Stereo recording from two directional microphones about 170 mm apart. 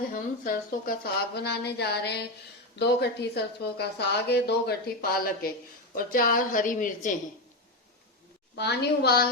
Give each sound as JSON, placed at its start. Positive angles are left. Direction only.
{"t": 0.1, "sound": "a woman's voice", "side_deg": 55}
{"t": 8.5, "sound": "a woman's voice", "side_deg": 80}